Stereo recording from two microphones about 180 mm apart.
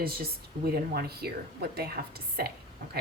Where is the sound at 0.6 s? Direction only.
60° right (ahead or behind).